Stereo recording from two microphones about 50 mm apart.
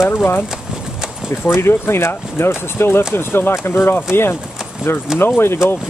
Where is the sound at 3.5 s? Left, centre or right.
Left.